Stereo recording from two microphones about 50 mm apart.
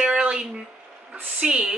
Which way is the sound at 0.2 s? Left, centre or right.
Right.